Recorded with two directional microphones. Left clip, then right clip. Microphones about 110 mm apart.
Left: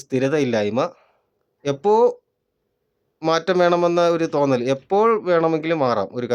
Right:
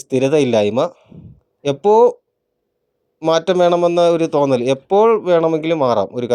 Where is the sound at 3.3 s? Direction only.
25° right (ahead or behind).